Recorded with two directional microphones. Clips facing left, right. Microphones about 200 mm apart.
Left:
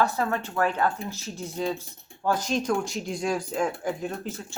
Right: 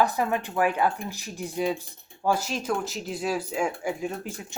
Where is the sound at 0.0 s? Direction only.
15° right (ahead or behind).